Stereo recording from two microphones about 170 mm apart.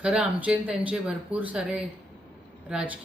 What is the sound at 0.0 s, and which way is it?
Speech, 5° right (ahead or behind).